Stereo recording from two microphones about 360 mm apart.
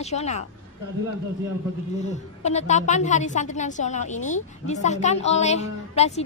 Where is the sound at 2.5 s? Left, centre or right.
Centre.